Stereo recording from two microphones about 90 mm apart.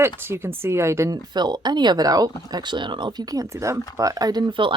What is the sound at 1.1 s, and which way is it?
Speech, 50° right (ahead or behind).